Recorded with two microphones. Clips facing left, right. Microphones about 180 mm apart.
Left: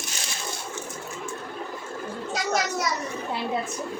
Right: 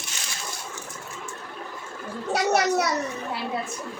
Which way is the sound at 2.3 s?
65° right (ahead or behind).